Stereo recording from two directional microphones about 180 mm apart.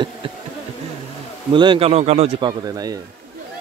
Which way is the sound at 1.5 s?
25° right (ahead or behind).